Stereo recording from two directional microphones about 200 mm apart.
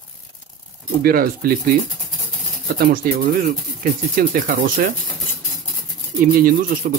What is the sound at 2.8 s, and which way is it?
Speech, 45° right (ahead or behind).